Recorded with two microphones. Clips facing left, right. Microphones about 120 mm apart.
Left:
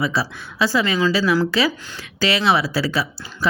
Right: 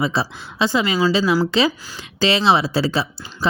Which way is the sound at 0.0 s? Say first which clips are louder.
Right 1 dB; 25° right (ahead or behind).